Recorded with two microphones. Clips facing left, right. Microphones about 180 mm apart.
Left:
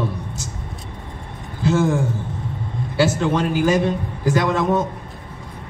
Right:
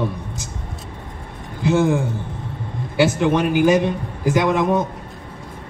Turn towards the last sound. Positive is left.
turn(degrees=-15)  # may be behind; listen again after turning